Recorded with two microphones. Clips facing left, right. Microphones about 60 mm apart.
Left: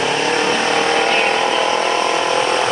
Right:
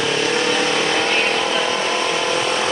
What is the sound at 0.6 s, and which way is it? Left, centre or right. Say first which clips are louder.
Vehicle: left 3 dB; left.